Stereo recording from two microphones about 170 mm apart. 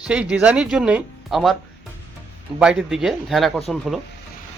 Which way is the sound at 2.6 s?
5° right (ahead or behind).